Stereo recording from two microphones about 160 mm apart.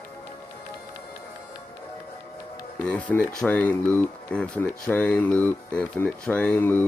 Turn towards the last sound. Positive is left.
turn(degrees=10)  # may be behind; listen again after turning